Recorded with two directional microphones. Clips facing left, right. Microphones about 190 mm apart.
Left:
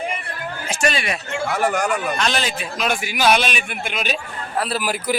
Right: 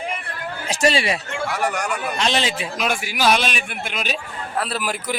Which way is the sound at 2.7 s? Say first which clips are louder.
Left 1 dB; 5° right (ahead or behind).